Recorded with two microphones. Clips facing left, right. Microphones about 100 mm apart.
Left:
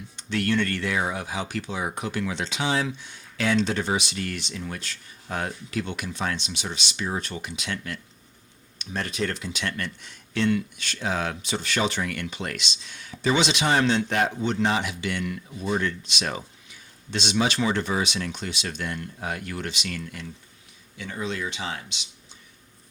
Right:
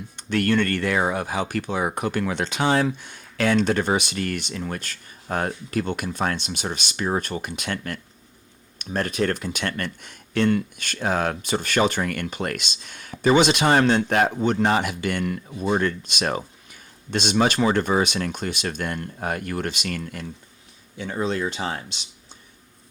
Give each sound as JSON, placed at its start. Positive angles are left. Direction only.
{"t": 0.2, "sound": "speech", "side_deg": -50}